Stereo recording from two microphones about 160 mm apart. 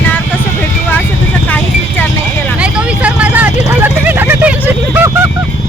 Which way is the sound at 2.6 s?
5° right (ahead or behind).